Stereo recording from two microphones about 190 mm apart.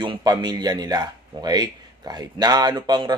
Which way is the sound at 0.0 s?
25° right (ahead or behind).